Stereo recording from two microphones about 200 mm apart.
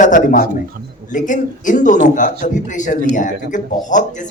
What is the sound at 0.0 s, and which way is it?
Speech, 40° left (ahead or behind).